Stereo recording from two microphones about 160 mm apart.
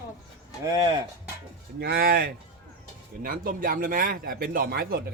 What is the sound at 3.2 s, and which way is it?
Speech, 60° right (ahead or behind).